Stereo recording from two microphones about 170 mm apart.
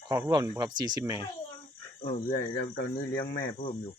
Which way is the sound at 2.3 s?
55° left (ahead or behind).